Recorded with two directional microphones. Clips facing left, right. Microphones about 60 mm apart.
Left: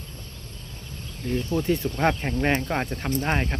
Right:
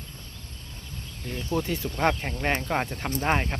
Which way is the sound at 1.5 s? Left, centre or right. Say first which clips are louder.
Left 2 dB; centre.